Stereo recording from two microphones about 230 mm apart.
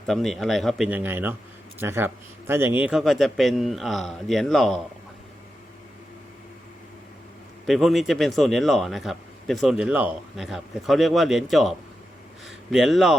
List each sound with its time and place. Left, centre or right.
0.1 s speech: centre
7.7 s speech: centre